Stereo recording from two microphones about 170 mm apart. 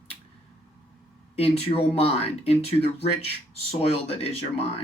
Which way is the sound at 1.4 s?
35° left (ahead or behind).